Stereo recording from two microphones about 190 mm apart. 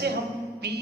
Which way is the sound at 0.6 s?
60° right (ahead or behind).